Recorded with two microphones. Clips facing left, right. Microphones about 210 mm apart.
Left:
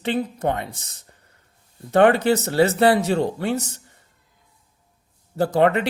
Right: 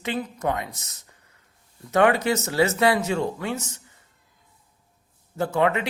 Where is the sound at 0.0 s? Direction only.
30° left (ahead or behind).